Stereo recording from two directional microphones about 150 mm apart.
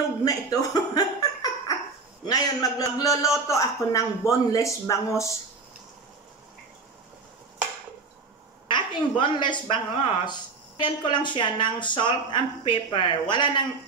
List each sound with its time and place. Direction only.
0.2 s a sound: 25° left (ahead or behind)
2.2 s a man's voice: 25° left (ahead or behind)
8.6 s a woman's voice: 30° left (ahead or behind)